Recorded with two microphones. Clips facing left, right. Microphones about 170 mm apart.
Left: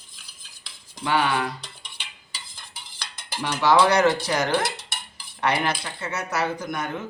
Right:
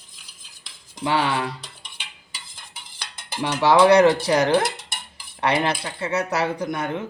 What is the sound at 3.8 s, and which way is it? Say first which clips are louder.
Speech: right 5 dB; 30° right (ahead or behind).